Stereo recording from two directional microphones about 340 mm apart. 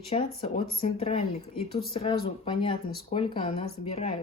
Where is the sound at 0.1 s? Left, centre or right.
Centre.